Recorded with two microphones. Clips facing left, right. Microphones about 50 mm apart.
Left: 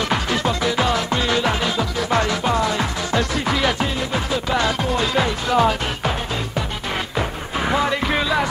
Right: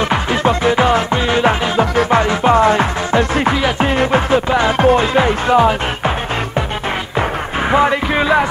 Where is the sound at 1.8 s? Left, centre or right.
Right.